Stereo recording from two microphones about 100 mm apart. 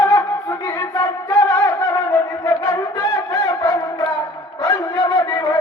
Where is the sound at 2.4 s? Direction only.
35° left (ahead or behind).